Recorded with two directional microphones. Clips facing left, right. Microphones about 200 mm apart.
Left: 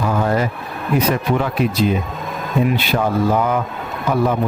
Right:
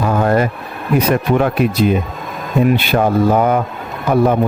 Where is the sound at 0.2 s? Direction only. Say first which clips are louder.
Right 5 dB; 55° right (ahead or behind).